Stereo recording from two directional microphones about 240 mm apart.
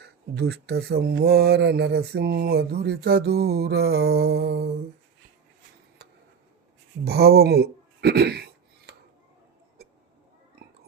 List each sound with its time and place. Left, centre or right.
0.0 s speech: right
7.0 s speech: right
8.9 s dishes: right